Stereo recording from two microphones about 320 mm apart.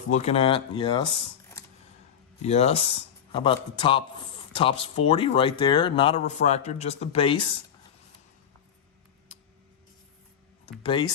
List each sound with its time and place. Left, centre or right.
0.1 s speech: centre
2.4 s speech: centre